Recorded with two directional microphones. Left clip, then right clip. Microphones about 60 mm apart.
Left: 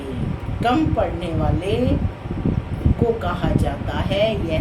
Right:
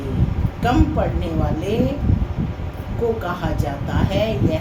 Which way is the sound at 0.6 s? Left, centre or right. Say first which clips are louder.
Even; centre.